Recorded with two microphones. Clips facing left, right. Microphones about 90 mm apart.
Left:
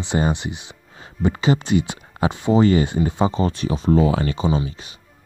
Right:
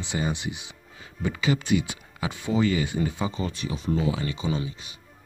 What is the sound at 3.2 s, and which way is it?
Speech, 50° left (ahead or behind).